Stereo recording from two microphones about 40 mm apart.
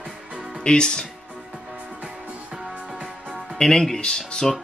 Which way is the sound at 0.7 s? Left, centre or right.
Centre.